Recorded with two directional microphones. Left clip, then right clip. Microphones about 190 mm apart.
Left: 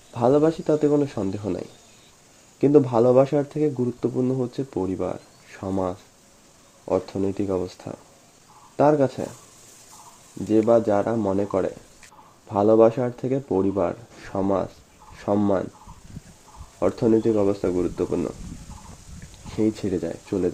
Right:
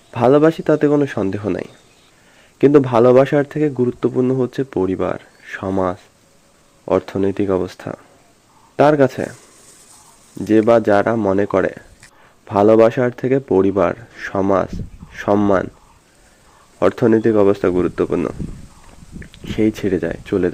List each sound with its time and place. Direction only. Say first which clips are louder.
0.1 s speech: right 7 dB; 15° right (ahead or behind)
2.9 s a man's voice: right 6 dB; 30° right (ahead or behind)
3.2 s speech: right 6 dB; 10° right (ahead or behind)
10.4 s a man's voice: right 6 dB; 15° right (ahead or behind)
16.9 s speech: right 5 dB; 10° right (ahead or behind)
19.5 s speech: right 6 dB; 10° right (ahead or behind)